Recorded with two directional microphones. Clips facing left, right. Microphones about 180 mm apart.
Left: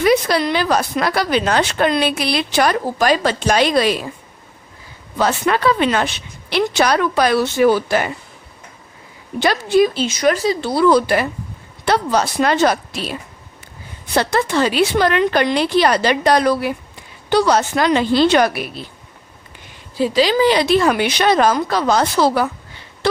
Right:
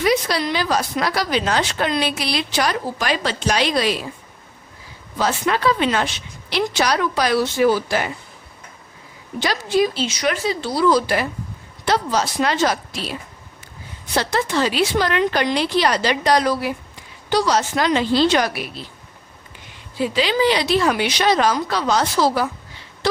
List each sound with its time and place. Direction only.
0.0 s a woman's voice: 55° left (ahead or behind)
5.1 s a woman's voice: 60° left (ahead or behind)
9.4 s speech: 55° left (ahead or behind); by 10.6 s 40° left (ahead or behind)
10.6 s a woman's voice: 55° left (ahead or behind)
20.0 s speech: 35° left (ahead or behind); by 22.4 s 60° left (ahead or behind)